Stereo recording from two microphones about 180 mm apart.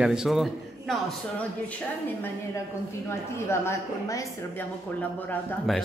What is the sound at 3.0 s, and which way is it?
A woman's voice, 15° left (ahead or behind).